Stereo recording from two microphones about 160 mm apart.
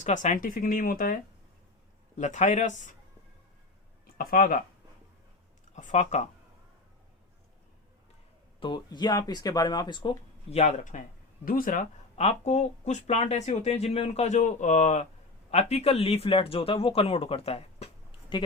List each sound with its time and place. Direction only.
0.0 s speech: 50° left (ahead or behind)
2.1 s speech: 45° left (ahead or behind)
4.0 s speech: 65° left (ahead or behind)
5.7 s speech: 50° left (ahead or behind)
8.6 s speech: 25° left (ahead or behind); by 11.0 s 50° left (ahead or behind)
11.4 s speech: 60° left (ahead or behind); by 18.4 s 35° left (ahead or behind)